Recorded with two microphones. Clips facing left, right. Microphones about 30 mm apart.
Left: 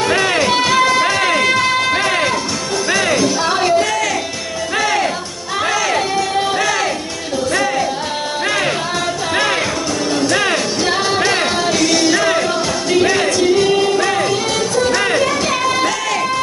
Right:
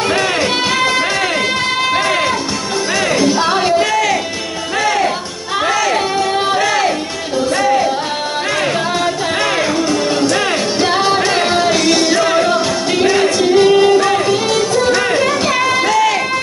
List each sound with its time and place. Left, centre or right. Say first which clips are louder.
0.0 s music: even; centre
1.6 s a sound: even; centre
3.2 s music: right 2 dB; centre
5.6 s music: right 2 dB; centre
6.1 s music: right 2 dB; centre
10.8 s music: right 3 dB; centre
11.1 s music: right 1 dB; centre
11.4 s music: right 3 dB; centre
14.9 s a sound: right 2 dB; centre